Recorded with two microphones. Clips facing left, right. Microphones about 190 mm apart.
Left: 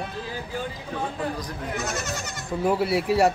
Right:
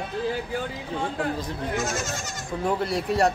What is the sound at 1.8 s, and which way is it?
Speech, 65° left (ahead or behind).